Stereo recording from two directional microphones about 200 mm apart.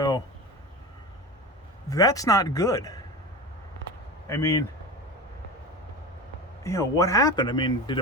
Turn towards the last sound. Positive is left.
turn(degrees=20)  # may be behind; listen again after turning